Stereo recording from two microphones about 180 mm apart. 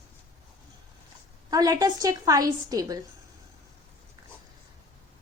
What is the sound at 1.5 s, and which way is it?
A woman's voice, 20° right (ahead or behind).